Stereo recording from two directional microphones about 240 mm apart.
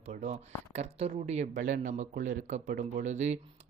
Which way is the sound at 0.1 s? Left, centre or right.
Right.